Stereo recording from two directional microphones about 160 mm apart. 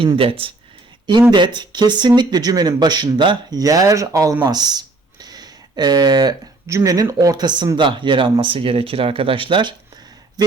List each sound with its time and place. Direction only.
0.2 s speech: 35° right (ahead or behind)